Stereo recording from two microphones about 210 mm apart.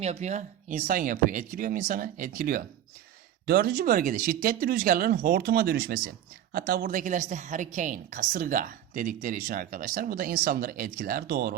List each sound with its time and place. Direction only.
0.0 s speech: 30° right (ahead or behind)